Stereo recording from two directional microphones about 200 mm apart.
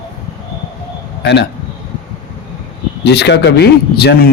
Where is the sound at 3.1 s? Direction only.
55° left (ahead or behind).